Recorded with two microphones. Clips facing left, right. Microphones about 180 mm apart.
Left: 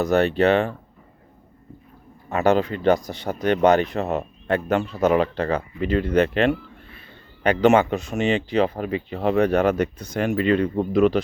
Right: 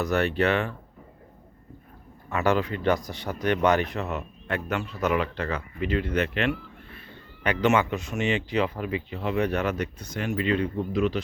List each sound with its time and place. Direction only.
0.0 s speech: 25° left (ahead or behind)
2.3 s speech: 25° left (ahead or behind)
9.6 s speech: 55° left (ahead or behind)